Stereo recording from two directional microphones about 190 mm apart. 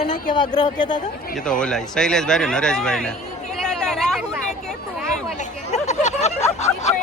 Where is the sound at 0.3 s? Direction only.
20° left (ahead or behind).